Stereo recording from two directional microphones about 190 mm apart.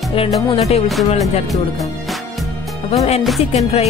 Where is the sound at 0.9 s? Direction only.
Centre (ahead or behind).